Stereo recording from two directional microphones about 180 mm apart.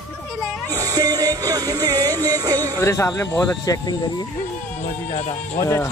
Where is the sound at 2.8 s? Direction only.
15° left (ahead or behind).